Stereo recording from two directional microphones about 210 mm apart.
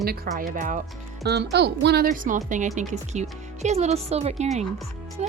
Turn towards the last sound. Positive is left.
turn(degrees=-30)  # may be behind; listen again after turning